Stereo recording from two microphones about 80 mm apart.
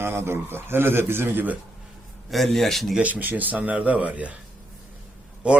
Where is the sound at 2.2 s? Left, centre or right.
Centre.